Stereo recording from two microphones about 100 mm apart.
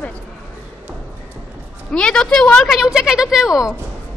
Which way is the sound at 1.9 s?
10° left (ahead or behind).